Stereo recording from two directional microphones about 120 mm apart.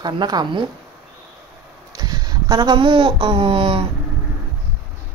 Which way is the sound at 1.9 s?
35° right (ahead or behind).